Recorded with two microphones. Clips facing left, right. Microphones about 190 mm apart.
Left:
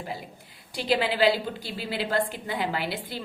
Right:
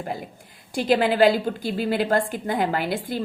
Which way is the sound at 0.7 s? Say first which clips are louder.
Right 6 dB; 50° right (ahead or behind).